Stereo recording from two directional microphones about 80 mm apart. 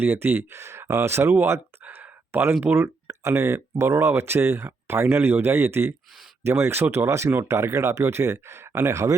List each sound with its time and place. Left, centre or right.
0.0 s speech: right
1.4 s a sound: right
2.6 s speech: right